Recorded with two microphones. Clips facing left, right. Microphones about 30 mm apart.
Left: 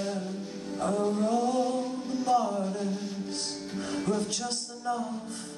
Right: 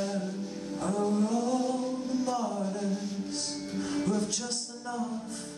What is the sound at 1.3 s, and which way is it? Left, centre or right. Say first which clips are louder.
Music: left 2 dB; left.